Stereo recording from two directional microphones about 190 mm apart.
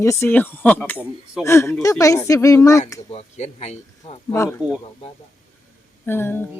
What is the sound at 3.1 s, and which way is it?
Speech, 35° left (ahead or behind).